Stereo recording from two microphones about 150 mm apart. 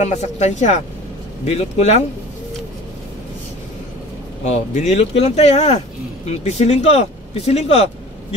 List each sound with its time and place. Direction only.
0.0 s speech: 50° left (ahead or behind)
4.5 s speech: 50° left (ahead or behind)